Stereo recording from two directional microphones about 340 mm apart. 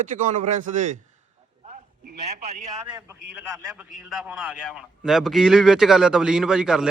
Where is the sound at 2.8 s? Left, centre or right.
Centre.